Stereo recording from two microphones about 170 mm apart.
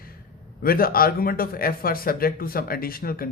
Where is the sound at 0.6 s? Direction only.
60° left (ahead or behind).